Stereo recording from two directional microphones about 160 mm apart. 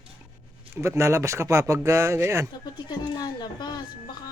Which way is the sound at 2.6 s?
25° left (ahead or behind).